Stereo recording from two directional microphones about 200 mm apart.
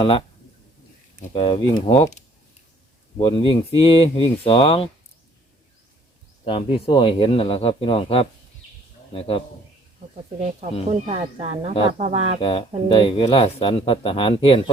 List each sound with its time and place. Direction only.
0.0 s speech: 25° left (ahead or behind)
1.3 s speech: 25° left (ahead or behind)
6.4 s speech: 25° left (ahead or behind)
11.0 s speech: 30° right (ahead or behind)
12.4 s speech: 25° left (ahead or behind)